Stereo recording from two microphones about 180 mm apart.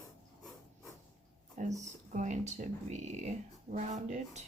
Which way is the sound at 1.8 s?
40° right (ahead or behind).